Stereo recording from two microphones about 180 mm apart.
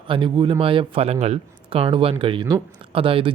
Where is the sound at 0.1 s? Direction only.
30° right (ahead or behind).